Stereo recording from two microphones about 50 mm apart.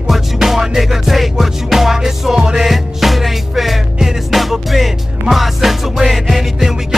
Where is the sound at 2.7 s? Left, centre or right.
Centre.